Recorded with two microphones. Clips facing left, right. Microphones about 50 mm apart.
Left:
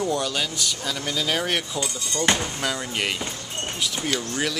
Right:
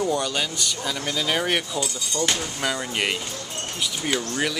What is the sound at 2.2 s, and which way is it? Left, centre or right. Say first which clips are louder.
Speech: left 3 dB; left.